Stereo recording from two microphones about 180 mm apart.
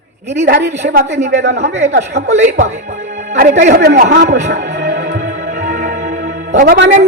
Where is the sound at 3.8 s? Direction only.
60° right (ahead or behind).